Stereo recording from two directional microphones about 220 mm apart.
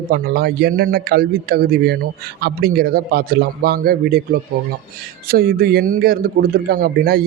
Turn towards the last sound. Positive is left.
turn(degrees=-45)  # may be behind; listen again after turning